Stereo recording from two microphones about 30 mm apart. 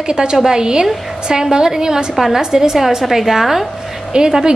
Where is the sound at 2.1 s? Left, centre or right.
Centre.